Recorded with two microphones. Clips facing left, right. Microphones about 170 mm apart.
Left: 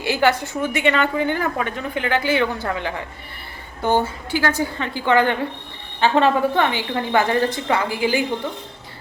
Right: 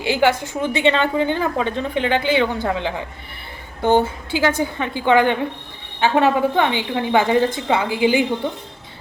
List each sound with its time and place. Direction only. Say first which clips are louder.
0.0 s speech: right 1 dB; 15° right (ahead or behind)